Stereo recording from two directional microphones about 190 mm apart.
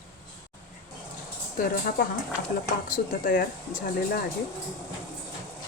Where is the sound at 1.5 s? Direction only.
50° left (ahead or behind).